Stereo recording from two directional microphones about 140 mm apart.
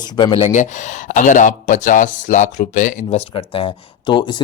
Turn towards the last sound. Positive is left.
turn(degrees=35)  # may be behind; listen again after turning